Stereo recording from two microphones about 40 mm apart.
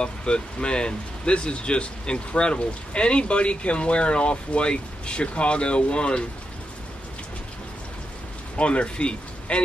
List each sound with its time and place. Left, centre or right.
0.0 s speech: left
8.5 s speech: left